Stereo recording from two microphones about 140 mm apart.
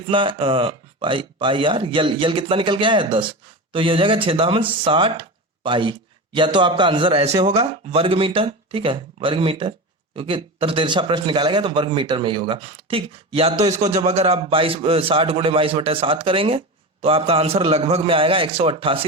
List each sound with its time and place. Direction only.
0.1 s a man's voice: 35° right (ahead or behind)